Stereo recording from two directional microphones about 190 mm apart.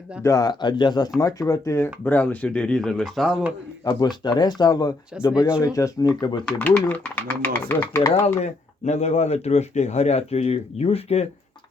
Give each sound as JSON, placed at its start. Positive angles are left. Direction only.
{"t": 0.2, "sound": "speech", "side_deg": 15}
{"t": 3.9, "sound": "speech", "side_deg": 20}
{"t": 6.4, "sound": "speech", "side_deg": 5}
{"t": 8.4, "sound": "speech", "side_deg": 35}